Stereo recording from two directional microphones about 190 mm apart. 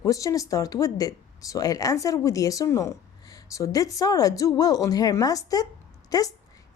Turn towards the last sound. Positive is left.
turn(degrees=20)  # may be behind; listen again after turning